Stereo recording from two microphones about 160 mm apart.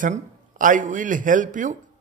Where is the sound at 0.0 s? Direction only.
55° right (ahead or behind).